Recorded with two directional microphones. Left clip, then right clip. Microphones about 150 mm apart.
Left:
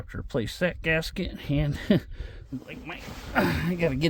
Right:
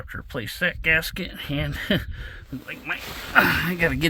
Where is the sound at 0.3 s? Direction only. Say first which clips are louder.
Right 2 dB; 60° left (ahead or behind); by 2.7 s 40° left (ahead or behind).